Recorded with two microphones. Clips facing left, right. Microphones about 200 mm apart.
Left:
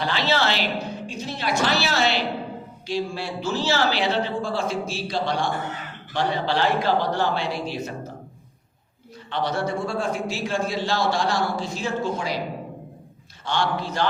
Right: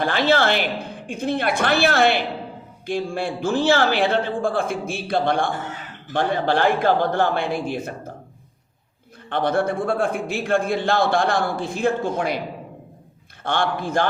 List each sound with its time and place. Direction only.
0.0 s a man's voice: 50° right (ahead or behind)
9.3 s a man's voice: 55° right (ahead or behind)
13.4 s a man's voice: 55° right (ahead or behind)